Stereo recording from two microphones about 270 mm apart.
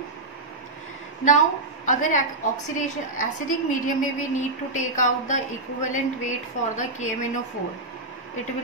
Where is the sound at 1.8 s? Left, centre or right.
Left.